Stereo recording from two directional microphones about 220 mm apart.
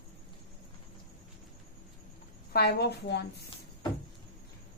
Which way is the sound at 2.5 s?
45° left (ahead or behind).